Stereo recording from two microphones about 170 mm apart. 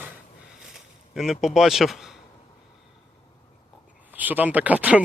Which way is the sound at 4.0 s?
10° right (ahead or behind).